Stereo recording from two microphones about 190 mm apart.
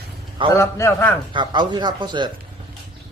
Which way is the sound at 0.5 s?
15° left (ahead or behind).